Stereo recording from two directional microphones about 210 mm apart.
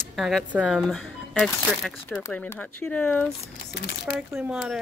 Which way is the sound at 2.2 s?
15° left (ahead or behind).